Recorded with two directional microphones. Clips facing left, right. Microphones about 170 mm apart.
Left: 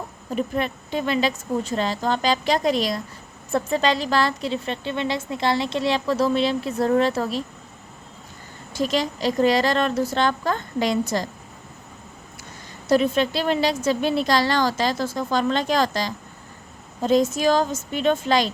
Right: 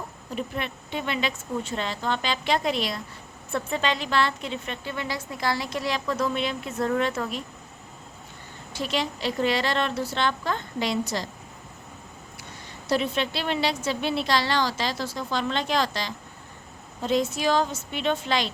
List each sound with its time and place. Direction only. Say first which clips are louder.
0.3 s a woman's voice: left 7 dB; 40° left (ahead or behind)
8.7 s a woman's voice: left 5 dB; 40° left (ahead or behind)
12.9 s a woman's voice: left 6 dB; 45° left (ahead or behind)